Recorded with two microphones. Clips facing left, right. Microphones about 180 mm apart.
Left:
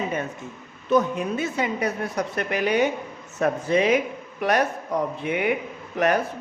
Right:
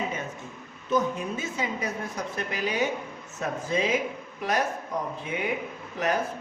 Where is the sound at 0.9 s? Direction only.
65° left (ahead or behind).